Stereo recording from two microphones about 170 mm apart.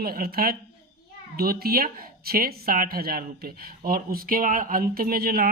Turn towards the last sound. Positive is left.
turn(degrees=-60)  # may be behind; listen again after turning